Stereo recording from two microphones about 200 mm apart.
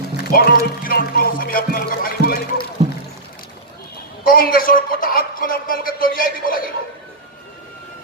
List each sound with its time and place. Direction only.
0.2 s music: 50° left (ahead or behind)
4.3 s a man's voice: 45° left (ahead or behind)